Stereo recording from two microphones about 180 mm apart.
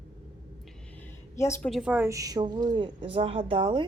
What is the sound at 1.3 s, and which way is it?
Speech, 15° left (ahead or behind).